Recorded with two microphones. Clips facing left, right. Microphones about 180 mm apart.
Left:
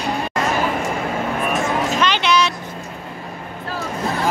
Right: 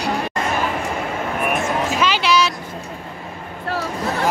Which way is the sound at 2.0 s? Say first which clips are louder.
Right 1 dB; 5° right (ahead or behind).